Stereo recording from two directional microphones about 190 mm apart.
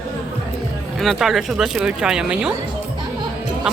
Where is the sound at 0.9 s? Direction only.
Centre (ahead or behind).